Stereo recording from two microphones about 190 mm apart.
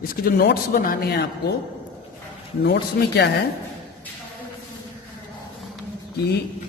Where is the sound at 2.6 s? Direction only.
60° left (ahead or behind).